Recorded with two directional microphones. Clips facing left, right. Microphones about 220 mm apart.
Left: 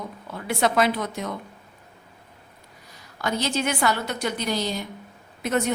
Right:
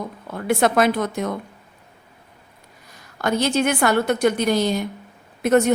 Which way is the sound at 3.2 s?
50° right (ahead or behind).